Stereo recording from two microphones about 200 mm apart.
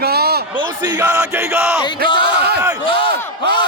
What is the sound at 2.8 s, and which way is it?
Battle cry, 25° left (ahead or behind).